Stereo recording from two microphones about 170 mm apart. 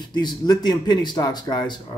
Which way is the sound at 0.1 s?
25° left (ahead or behind).